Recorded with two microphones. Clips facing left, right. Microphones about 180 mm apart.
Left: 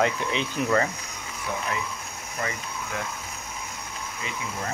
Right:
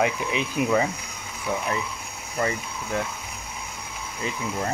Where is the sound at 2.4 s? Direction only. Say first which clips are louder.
Right 5 dB; 30° right (ahead or behind).